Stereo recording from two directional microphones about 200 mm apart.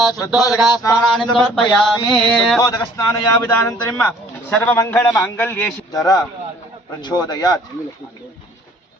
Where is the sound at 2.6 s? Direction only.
15° left (ahead or behind).